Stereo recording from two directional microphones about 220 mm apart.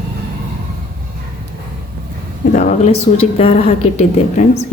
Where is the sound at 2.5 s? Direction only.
35° left (ahead or behind).